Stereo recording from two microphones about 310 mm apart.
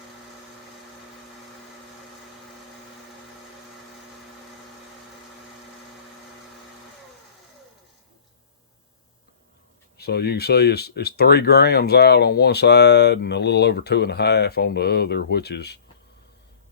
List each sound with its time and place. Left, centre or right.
10.0 s speech: left